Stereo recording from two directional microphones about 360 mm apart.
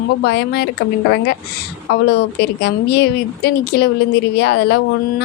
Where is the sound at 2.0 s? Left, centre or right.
Left.